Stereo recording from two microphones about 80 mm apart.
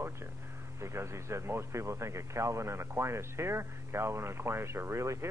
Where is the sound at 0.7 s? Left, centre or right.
Right.